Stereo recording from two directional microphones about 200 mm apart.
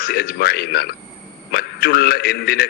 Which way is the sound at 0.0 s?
50° left (ahead or behind).